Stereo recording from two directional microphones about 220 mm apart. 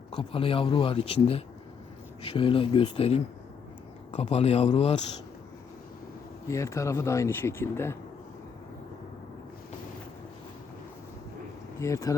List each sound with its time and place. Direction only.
0.1 s speech: 25° left (ahead or behind)
6.5 s speech: 15° left (ahead or behind)
11.8 s speech: 15° left (ahead or behind)